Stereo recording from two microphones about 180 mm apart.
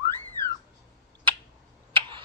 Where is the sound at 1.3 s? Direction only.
30° right (ahead or behind).